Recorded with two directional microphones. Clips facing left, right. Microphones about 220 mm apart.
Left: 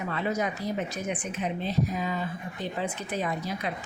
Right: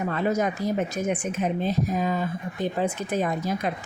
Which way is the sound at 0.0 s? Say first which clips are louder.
Right 5 dB; 45° right (ahead or behind).